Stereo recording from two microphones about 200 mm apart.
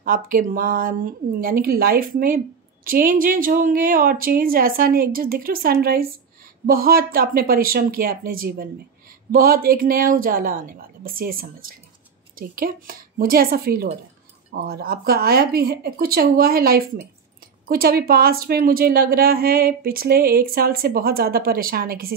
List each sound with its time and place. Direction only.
0.0 s speech: 45° right (ahead or behind)